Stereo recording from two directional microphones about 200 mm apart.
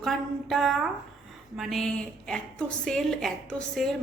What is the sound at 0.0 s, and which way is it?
A woman's voice, centre (ahead or behind).